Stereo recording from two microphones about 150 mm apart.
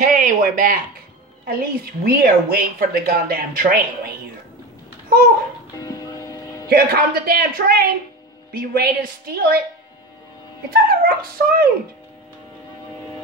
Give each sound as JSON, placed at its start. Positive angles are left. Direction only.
{"t": 0.0, "sound": "a sound", "side_deg": -60}
{"t": 1.4, "sound": "a woman's voice", "side_deg": -85}
{"t": 5.8, "sound": "music", "side_deg": 25}
{"t": 6.7, "sound": "a woman's voice", "side_deg": -90}
{"t": 10.7, "sound": "a woman's voice", "side_deg": -85}